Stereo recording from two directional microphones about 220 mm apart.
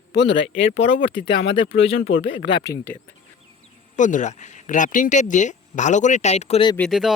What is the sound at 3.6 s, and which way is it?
Speech, 35° left (ahead or behind).